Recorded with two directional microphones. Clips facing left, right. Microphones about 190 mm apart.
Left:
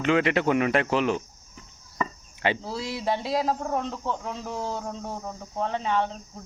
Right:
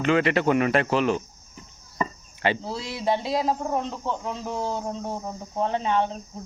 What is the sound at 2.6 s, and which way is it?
Speech, 25° right (ahead or behind).